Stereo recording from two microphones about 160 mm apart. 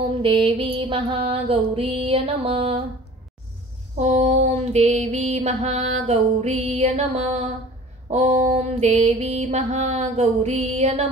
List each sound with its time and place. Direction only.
0.1 s mantra: 35° right (ahead or behind)
4.0 s mantra: 45° right (ahead or behind)